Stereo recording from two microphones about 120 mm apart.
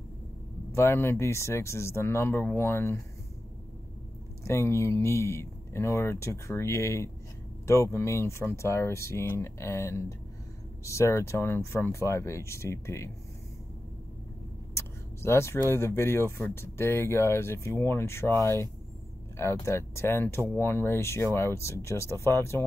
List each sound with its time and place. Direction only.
0.7 s speech: 20° left (ahead or behind)
4.5 s speech: 20° left (ahead or behind)
14.7 s speech: 20° left (ahead or behind)